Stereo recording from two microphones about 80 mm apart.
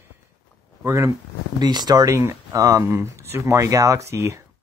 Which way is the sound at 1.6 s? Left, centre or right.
Right.